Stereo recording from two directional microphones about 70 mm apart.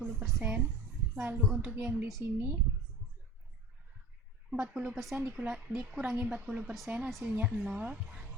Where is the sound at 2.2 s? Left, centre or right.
Right.